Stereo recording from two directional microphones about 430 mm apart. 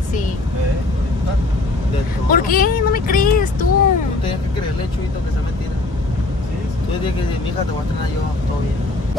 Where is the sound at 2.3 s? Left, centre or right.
Centre.